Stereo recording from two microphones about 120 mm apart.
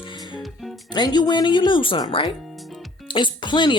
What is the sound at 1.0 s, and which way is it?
Speech, 35° left (ahead or behind).